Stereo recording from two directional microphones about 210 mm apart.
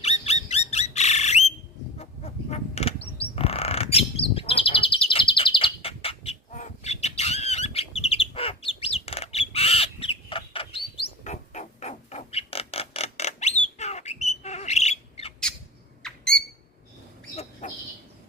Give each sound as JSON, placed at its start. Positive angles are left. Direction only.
{"t": 0.0, "sound": "squeak", "side_deg": 30}
{"t": 0.7, "sound": "squawk", "side_deg": 30}
{"t": 2.0, "sound": "a sound", "side_deg": 30}
{"t": 16.0, "sound": "squawk", "side_deg": 5}
{"t": 17.6, "sound": "bird", "side_deg": 35}